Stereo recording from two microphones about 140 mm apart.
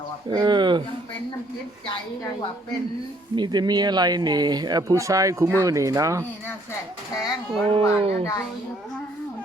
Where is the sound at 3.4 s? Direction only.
30° right (ahead or behind).